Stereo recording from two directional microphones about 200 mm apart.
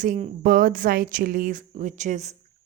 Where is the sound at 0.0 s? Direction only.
40° right (ahead or behind).